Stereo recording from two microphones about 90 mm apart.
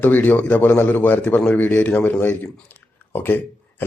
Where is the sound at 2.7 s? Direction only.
25° left (ahead or behind).